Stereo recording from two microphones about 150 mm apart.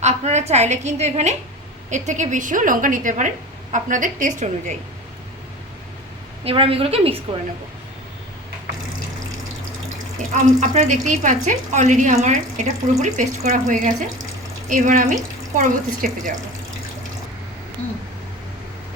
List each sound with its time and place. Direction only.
0.0 s a woman's voice: 50° right (ahead or behind)
6.4 s a woman's voice: 40° right (ahead or behind)
10.3 s speech: 60° right (ahead or behind)